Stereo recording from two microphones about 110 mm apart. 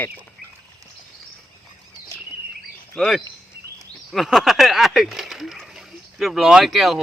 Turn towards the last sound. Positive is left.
turn(degrees=0)  # may be behind; listen again after turning